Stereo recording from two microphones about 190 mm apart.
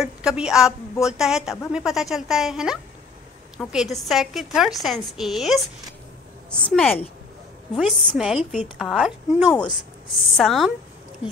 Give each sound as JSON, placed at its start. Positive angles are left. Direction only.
{"t": 0.0, "sound": "a woman's voice", "side_deg": -5}